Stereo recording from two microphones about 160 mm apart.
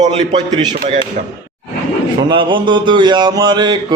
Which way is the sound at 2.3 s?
30° right (ahead or behind).